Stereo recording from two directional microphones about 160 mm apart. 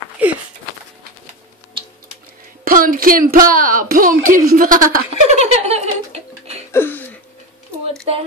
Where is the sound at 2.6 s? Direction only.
60° right (ahead or behind).